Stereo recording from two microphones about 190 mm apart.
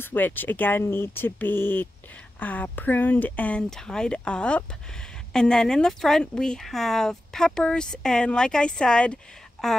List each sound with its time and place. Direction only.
0.0 s speech: 10° left (ahead or behind)